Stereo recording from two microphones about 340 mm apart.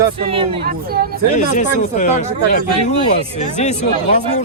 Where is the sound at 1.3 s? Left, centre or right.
Left.